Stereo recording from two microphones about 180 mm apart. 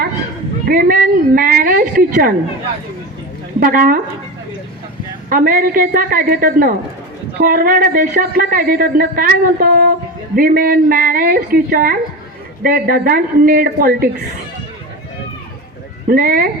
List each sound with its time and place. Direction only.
0.7 s a man's voice: 55° right (ahead or behind)
3.6 s a man's voice: 50° right (ahead or behind)
5.3 s a man's voice: 55° right (ahead or behind)
16.0 s a man's voice: 55° right (ahead or behind)